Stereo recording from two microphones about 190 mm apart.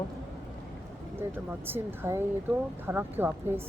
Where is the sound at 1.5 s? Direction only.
10° right (ahead or behind).